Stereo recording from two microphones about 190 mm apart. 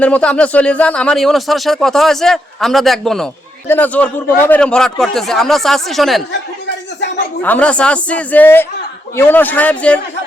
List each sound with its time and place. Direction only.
0.0 s speech: 5° left (ahead or behind)
7.4 s speech: 5° left (ahead or behind)